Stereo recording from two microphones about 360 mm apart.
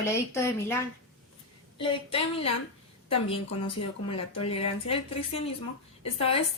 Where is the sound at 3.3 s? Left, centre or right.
Centre.